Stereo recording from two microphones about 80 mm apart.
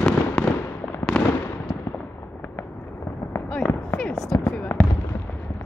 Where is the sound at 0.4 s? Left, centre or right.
Centre.